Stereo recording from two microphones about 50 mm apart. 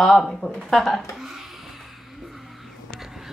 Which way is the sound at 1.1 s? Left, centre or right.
Centre.